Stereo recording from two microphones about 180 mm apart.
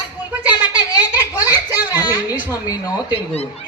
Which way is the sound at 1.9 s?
20° left (ahead or behind).